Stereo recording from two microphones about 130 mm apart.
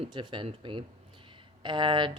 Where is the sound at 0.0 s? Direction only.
40° right (ahead or behind).